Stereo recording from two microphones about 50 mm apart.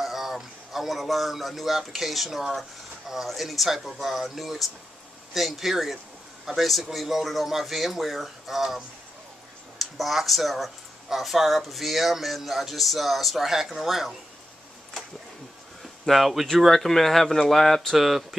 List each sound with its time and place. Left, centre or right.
0.0 s speech: centre
15.8 s a sound: centre
16.5 s speech: centre
17.9 s speech: centre